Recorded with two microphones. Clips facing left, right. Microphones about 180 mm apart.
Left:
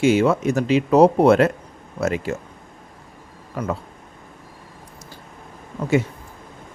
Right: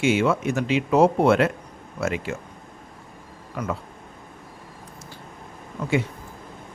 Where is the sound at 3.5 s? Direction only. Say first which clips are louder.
Left 3 dB; 35° left (ahead or behind).